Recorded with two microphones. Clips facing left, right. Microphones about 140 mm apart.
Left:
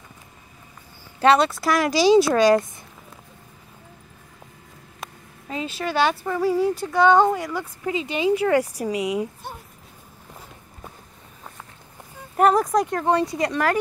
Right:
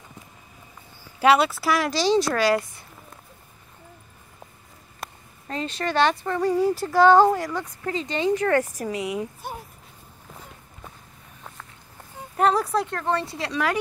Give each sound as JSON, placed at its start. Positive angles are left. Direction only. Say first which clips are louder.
{"t": 1.2, "sound": "speech", "louder": "left 1 dB", "side_deg": -5}
{"t": 2.3, "sound": "speech", "louder": "left 5 dB", "side_deg": 20}
{"t": 5.0, "sound": "speech", "louder": "even", "side_deg": 5}
{"t": 7.8, "sound": "a woman's voice", "louder": "left 2 dB", "side_deg": 10}
{"t": 12.4, "sound": "a woman's voice", "louder": "left 3 dB", "side_deg": 10}